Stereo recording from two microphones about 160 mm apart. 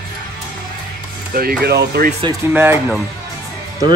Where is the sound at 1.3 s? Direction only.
75° right (ahead or behind).